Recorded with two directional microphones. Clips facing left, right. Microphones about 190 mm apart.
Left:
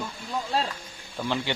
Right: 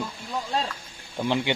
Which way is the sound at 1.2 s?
20° right (ahead or behind).